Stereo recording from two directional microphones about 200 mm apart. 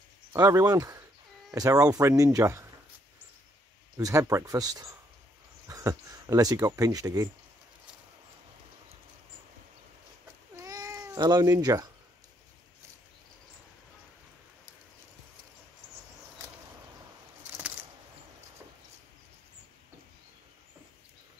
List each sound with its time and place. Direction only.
0.3 s speech: 15° right (ahead or behind)
3.9 s speech: 15° right (ahead or behind)
10.5 s cat: 15° right (ahead or behind)